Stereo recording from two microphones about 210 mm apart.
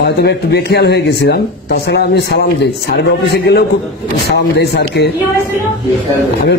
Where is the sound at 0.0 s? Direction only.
55° left (ahead or behind).